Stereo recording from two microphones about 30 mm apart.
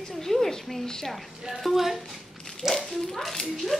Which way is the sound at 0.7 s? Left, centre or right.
Centre.